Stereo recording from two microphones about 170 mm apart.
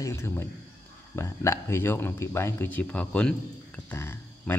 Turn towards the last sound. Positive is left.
turn(degrees=15)  # may be behind; listen again after turning